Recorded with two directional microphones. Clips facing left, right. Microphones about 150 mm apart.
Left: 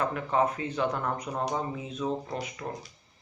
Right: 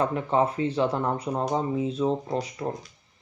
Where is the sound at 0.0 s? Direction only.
30° right (ahead or behind).